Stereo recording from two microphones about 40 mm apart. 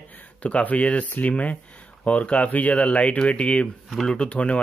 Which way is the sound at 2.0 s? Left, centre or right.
Left.